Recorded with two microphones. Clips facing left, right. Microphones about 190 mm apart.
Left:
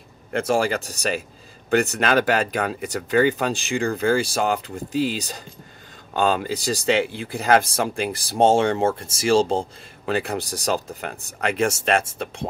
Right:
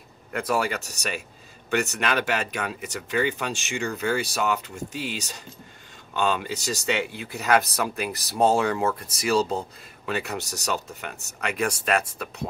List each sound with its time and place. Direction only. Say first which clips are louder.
0.3 s speech: left 5 dB; 30° left (ahead or behind)